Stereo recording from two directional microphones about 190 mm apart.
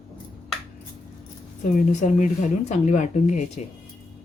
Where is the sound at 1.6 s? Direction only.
40° left (ahead or behind).